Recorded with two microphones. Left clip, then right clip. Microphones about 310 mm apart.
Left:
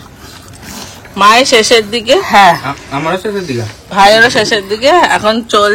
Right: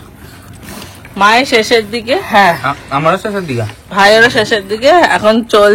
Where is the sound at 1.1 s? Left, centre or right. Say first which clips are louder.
Left 2 dB; centre.